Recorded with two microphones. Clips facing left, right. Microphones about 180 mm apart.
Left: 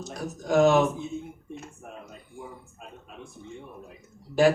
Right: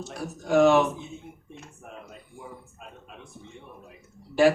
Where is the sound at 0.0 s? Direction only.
40° left (ahead or behind).